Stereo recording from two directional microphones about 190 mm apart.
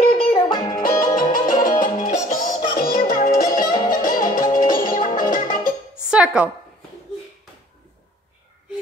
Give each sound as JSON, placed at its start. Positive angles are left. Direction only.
{"t": 0.0, "sound": "music", "side_deg": 30}
{"t": 1.5, "sound": "music", "side_deg": 45}
{"t": 6.0, "sound": "a sound", "side_deg": -5}